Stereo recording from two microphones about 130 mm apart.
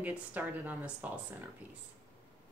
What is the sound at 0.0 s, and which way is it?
Speech, 10° right (ahead or behind).